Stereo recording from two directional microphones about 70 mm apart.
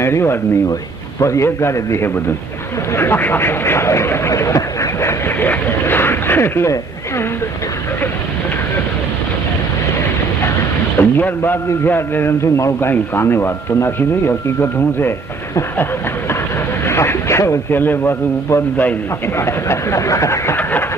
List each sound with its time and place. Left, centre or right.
0.0 s speech: left
5.4 s speech: left
11.0 s speech: left
12.5 s speech: left
12.9 s speech: left
16.8 s speech: left